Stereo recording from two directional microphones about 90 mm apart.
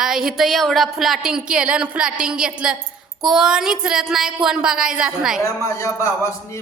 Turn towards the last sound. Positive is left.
turn(degrees=35)  # may be behind; listen again after turning